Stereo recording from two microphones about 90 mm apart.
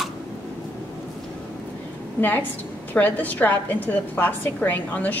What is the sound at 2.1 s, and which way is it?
A woman's voice, 20° left (ahead or behind).